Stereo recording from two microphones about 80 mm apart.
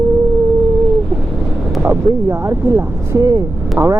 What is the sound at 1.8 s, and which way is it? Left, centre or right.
Speech, right.